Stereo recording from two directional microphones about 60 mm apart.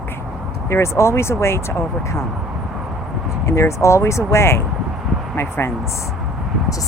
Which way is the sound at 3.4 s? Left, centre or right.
Left.